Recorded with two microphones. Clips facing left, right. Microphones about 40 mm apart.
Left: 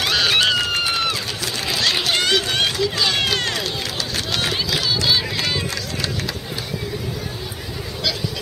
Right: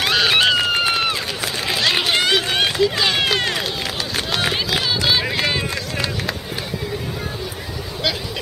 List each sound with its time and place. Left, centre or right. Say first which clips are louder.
0.0 s run: right 2 dB; centre